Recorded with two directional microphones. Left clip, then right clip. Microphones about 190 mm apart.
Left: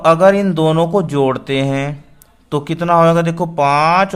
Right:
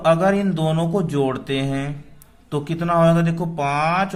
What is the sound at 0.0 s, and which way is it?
A man's voice, 25° left (ahead or behind).